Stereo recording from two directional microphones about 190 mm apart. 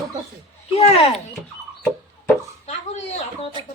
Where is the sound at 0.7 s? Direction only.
30° left (ahead or behind).